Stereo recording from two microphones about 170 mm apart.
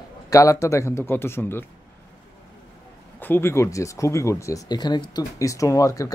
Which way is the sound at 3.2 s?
10° left (ahead or behind).